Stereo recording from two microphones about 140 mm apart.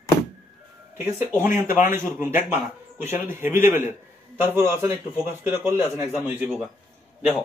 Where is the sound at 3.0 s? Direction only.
15° right (ahead or behind).